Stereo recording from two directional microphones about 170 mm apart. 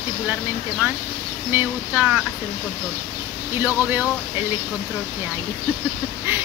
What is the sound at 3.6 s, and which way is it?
Speech, 10° right (ahead or behind).